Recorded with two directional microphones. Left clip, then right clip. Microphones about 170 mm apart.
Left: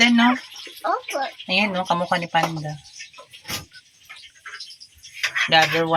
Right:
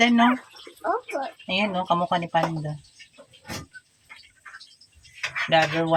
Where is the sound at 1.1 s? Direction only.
10° left (ahead or behind).